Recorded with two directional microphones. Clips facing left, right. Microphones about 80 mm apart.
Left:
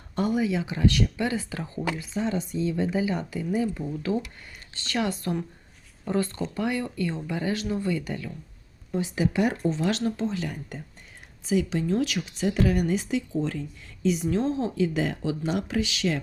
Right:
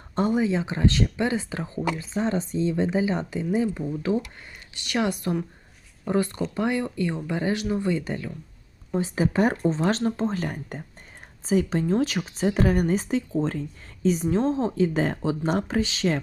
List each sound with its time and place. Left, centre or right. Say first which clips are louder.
0.2 s speech: right 2 dB; right